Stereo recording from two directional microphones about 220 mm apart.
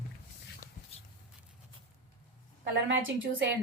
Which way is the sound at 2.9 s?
60° right (ahead or behind).